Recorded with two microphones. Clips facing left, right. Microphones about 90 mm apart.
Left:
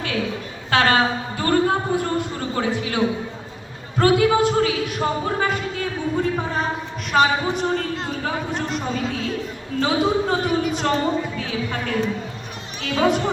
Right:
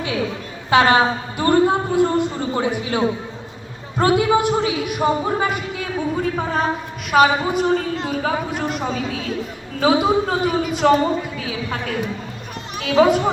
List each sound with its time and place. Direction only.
0.7 s a sound: 20° right (ahead or behind)
3.9 s a woman's voice: 20° right (ahead or behind)
6.3 s a man's voice: centre (ahead or behind)
9.8 s a man's voice: 5° right (ahead or behind)